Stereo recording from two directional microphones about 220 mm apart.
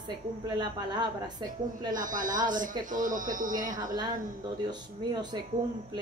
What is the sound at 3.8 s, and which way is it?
Speech, 20° right (ahead or behind).